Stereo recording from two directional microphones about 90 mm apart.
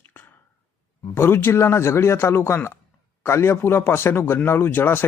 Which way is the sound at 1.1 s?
25° left (ahead or behind).